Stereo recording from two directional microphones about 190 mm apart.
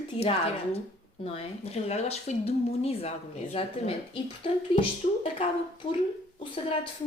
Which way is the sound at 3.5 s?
30° left (ahead or behind).